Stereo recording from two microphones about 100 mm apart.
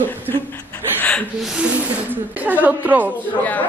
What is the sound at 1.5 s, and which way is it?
Speech, 10° right (ahead or behind).